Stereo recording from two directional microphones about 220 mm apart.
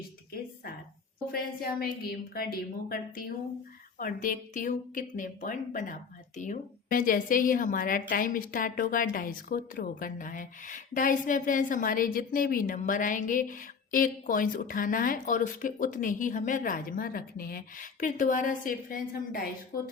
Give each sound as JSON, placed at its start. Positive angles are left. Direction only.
{"t": 1.3, "sound": "a woman's voice", "side_deg": 45}